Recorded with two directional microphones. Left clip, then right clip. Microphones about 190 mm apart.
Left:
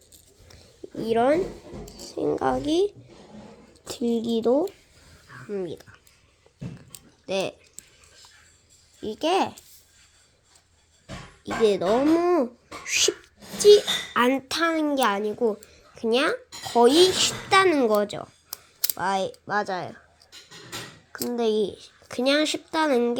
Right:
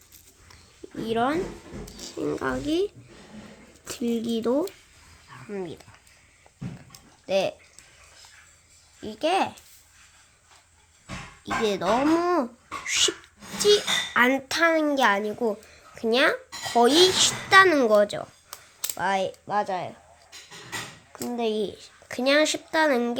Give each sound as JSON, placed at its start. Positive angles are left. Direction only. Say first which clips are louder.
{"t": 1.0, "sound": "speech", "louder": "left 4 dB", "side_deg": 10}
{"t": 2.4, "sound": "speech", "louder": "left 3 dB", "side_deg": 15}
{"t": 3.8, "sound": "speech", "louder": "left 2 dB", "side_deg": 5}
{"t": 7.3, "sound": "speech", "louder": "right 3 dB", "side_deg": 5}
{"t": 9.0, "sound": "speech", "louder": "left 1 dB", "side_deg": 15}
{"t": 11.4, "sound": "a woman's voice", "louder": "left 3 dB", "side_deg": 0}
{"t": 18.5, "sound": "a sound", "louder": "left 4 dB", "side_deg": 25}
{"t": 18.9, "sound": "speech", "louder": "right 1 dB", "side_deg": 0}
{"t": 21.3, "sound": "a child's voice", "louder": "left 3 dB", "side_deg": 10}